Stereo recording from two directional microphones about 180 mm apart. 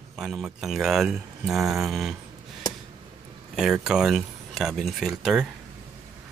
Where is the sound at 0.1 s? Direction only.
5° right (ahead or behind).